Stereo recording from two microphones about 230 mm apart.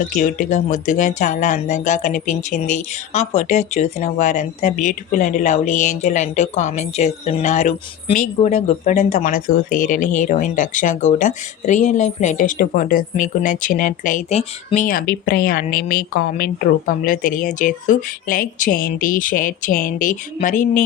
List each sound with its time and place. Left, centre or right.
0.1 s speech: left